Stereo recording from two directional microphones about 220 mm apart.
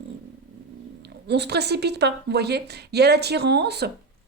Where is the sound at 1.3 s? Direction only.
50° right (ahead or behind).